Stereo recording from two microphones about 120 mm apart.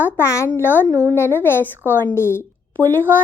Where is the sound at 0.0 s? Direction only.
20° left (ahead or behind).